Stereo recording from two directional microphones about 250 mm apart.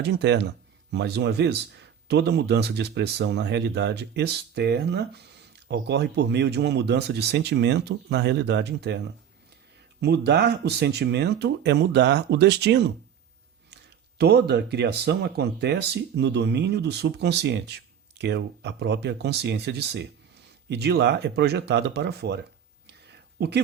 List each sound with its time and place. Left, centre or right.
0.0 s speech: right
10.0 s speech: right
14.2 s speech: right
23.4 s speech: right